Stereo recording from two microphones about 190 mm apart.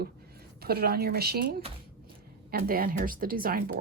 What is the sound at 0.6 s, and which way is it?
Speech, 55° right (ahead or behind).